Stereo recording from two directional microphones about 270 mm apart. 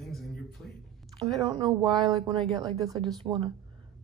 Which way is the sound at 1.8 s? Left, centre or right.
Centre.